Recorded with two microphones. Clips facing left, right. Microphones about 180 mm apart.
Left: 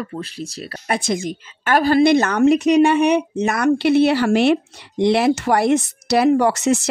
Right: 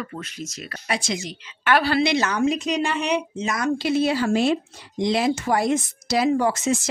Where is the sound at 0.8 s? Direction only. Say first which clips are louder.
Left 6 dB; 55° left (ahead or behind).